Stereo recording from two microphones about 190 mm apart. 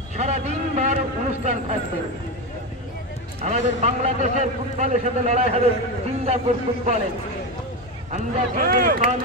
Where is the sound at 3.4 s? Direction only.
35° right (ahead or behind).